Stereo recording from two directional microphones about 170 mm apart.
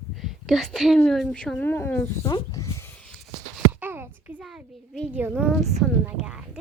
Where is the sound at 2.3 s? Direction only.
20° left (ahead or behind).